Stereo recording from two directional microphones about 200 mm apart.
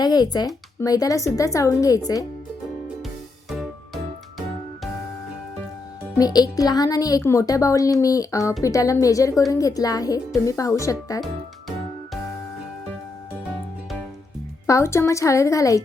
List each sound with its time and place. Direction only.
0.0 s speech: 20° left (ahead or behind)
3.5 s music: centre (ahead or behind)
6.1 s speech: 20° left (ahead or behind)
14.7 s speech: 15° left (ahead or behind)